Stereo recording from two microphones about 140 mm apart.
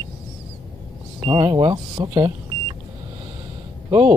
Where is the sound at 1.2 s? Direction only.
40° right (ahead or behind).